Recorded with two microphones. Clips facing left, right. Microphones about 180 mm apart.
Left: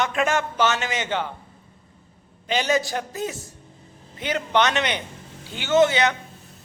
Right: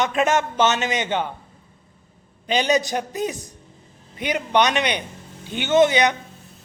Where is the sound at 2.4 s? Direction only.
20° right (ahead or behind).